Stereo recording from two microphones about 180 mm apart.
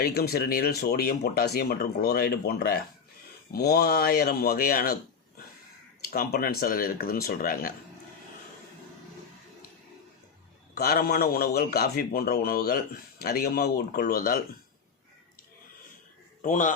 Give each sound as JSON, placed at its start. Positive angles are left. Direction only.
{"t": 0.0, "sound": "a man's voice", "side_deg": 60}
{"t": 6.1, "sound": "a man's voice", "side_deg": 55}
{"t": 10.8, "sound": "a man's voice", "side_deg": 55}
{"t": 16.4, "sound": "a man's voice", "side_deg": 45}